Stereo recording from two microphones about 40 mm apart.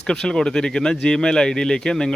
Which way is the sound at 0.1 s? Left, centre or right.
Centre.